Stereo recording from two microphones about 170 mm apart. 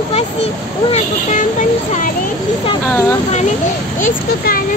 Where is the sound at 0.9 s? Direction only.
45° left (ahead or behind).